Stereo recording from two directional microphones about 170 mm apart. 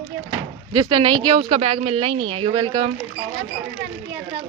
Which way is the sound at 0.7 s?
25° right (ahead or behind).